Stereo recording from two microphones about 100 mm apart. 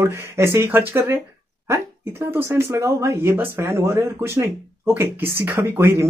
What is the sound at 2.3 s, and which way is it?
Speech, 25° right (ahead or behind).